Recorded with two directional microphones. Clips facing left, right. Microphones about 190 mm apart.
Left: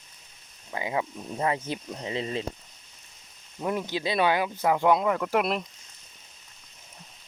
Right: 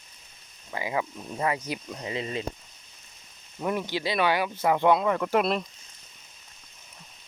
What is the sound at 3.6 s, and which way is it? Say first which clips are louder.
Speech: even; 20° left (ahead or behind).